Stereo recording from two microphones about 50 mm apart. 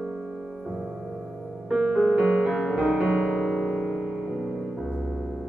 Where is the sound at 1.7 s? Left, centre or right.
Centre.